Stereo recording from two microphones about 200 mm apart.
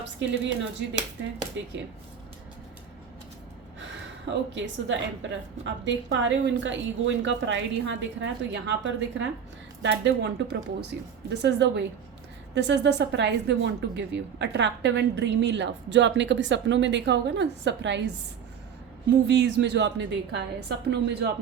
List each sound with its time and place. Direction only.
0.0 s speech: 65° right (ahead or behind)
4.5 s speech: 60° right (ahead or behind)
19.3 s speech: 60° right (ahead or behind)